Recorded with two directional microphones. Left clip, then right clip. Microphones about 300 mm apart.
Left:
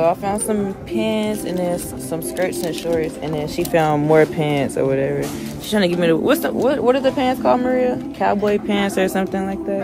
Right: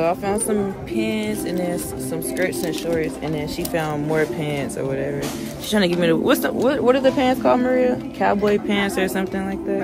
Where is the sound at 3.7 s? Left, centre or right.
Left.